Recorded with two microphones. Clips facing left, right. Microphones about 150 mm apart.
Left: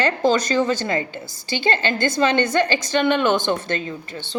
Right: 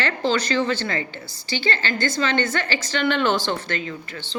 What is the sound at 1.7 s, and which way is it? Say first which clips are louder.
A woman's voice: left 4 dB; 20° left (ahead or behind).